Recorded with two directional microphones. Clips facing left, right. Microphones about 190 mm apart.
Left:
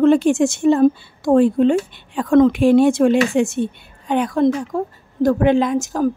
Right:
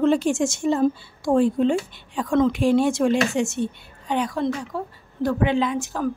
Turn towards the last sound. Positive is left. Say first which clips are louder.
# left 6 dB
turn(degrees=45)  # may be behind; listen again after turning